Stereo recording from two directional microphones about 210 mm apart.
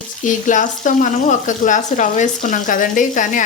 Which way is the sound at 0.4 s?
35° left (ahead or behind).